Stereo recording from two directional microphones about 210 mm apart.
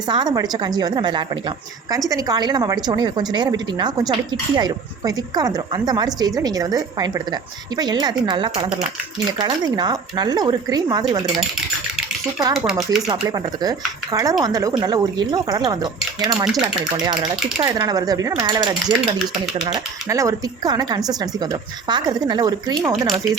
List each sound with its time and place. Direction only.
0.1 s a woman's voice: 20° right (ahead or behind)
12.5 s speech: centre (ahead or behind)
13.1 s speech: 20° right (ahead or behind)
16.4 s speech: centre (ahead or behind)
17.6 s a woman's voice: 20° right (ahead or behind)